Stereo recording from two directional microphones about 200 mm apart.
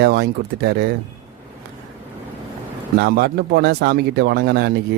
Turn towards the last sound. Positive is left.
turn(degrees=-55)  # may be behind; listen again after turning